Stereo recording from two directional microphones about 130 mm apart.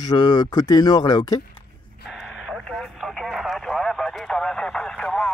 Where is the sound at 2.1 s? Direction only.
5° right (ahead or behind).